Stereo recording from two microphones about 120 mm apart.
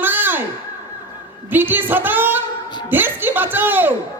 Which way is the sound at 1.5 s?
15° right (ahead or behind).